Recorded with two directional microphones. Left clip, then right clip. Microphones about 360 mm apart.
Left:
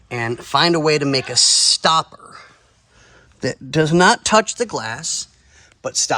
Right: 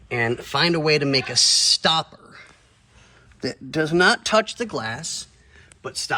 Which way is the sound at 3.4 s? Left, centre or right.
Left.